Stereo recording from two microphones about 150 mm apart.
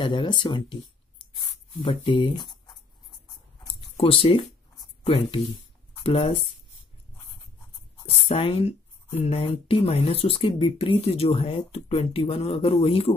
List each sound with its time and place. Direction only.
0.0 s speech: 35° left (ahead or behind)
3.9 s speech: 40° left (ahead or behind)
8.3 s speech: 40° left (ahead or behind)